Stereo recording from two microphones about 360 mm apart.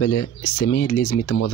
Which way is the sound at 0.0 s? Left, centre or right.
Left.